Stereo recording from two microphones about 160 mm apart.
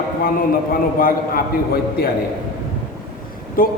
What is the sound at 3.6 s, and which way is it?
Speech, 60° left (ahead or behind).